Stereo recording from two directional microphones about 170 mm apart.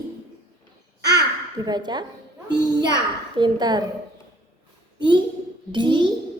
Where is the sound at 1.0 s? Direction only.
85° right.